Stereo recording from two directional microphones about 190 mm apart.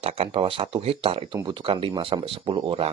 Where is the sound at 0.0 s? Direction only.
30° right (ahead or behind).